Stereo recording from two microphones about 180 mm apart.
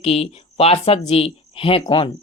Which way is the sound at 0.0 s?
35° left (ahead or behind).